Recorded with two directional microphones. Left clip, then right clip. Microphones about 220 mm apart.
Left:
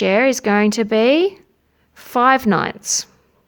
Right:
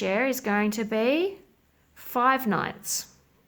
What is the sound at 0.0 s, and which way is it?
Speech, 40° left (ahead or behind).